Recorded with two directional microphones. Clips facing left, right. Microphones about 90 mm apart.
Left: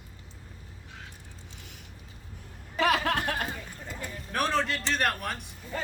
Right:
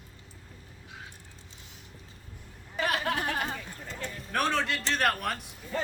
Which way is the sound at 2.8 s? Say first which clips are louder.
Left 4 dB; 90° left.